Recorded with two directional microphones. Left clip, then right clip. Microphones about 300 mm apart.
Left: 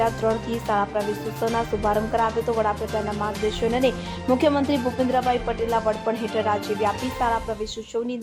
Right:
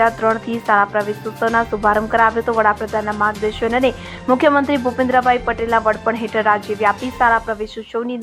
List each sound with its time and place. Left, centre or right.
0.0 s speech: centre